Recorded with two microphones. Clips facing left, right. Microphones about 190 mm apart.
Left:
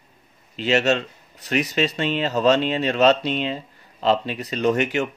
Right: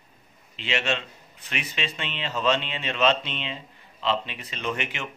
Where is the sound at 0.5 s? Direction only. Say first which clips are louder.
Left 9 dB; 40° left (ahead or behind).